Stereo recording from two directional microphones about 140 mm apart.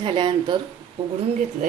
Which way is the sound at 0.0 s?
35° right (ahead or behind).